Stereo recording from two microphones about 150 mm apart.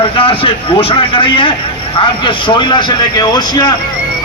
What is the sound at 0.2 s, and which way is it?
A man's voice, 35° left (ahead or behind).